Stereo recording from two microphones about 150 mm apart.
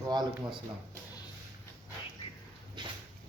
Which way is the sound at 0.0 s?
25° right (ahead or behind).